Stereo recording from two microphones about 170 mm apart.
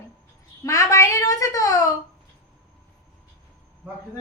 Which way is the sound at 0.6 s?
20° left (ahead or behind).